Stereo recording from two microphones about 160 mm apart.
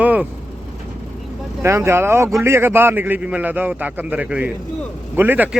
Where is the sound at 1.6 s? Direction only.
15° right (ahead or behind).